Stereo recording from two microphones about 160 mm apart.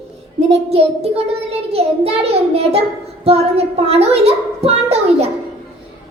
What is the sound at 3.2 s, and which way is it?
A woman's voice, 40° right (ahead or behind).